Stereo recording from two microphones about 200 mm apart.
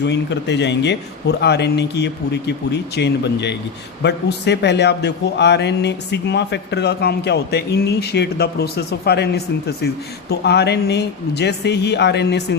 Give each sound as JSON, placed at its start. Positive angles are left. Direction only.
{"t": 0.0, "sound": "a man's voice", "side_deg": 60}